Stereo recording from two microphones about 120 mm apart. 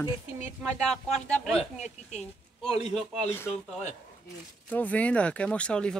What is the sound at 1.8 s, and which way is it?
Speech, 70° left (ahead or behind).